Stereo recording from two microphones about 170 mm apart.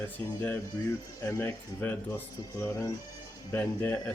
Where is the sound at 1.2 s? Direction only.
15° left (ahead or behind).